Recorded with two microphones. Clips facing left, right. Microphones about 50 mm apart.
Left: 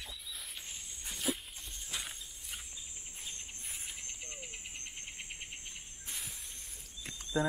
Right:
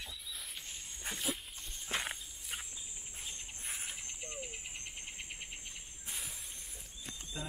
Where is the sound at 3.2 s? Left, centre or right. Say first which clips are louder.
Right 1 dB; centre.